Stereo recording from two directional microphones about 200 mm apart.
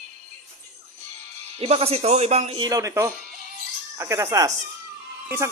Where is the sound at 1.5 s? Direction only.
30° right (ahead or behind).